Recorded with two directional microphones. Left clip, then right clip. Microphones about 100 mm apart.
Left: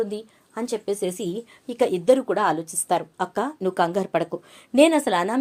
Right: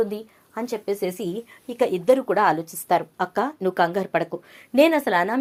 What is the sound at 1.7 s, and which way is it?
Speech, 20° left (ahead or behind).